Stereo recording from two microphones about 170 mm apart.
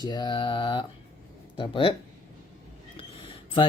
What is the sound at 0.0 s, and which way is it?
Speech, 25° left (ahead or behind).